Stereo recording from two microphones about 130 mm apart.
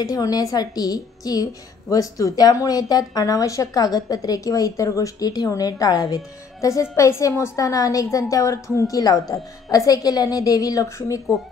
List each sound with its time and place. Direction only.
0.0 s a woman's voice: 30° left (ahead or behind)